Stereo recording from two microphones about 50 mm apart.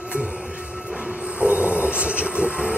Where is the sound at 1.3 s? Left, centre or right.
Right.